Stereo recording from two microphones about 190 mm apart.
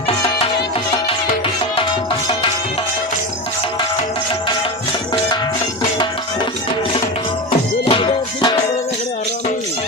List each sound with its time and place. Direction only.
1.7 s music: 25° left (ahead or behind)
7.9 s music: 25° left (ahead or behind)